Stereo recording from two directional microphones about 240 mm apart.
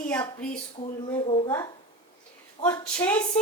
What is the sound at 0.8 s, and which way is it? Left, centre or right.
A woman's voice, left.